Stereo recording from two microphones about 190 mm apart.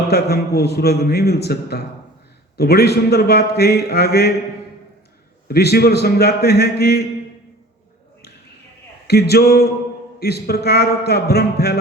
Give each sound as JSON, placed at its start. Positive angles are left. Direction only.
{"t": 0.1, "sound": "a man's voice", "side_deg": 55}
{"t": 5.5, "sound": "a man's voice", "side_deg": 55}
{"t": 9.0, "sound": "a man's voice", "side_deg": 55}